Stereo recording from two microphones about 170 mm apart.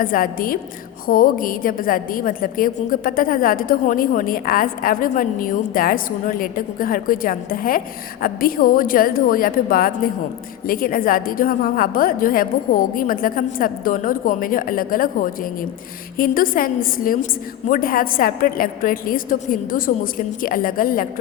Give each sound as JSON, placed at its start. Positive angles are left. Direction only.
{"t": 0.0, "sound": "a woman's voice", "side_deg": 55}